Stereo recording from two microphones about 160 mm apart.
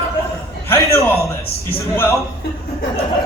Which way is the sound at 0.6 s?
15° left (ahead or behind).